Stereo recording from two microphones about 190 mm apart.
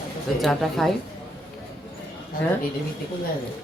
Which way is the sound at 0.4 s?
Centre (ahead or behind).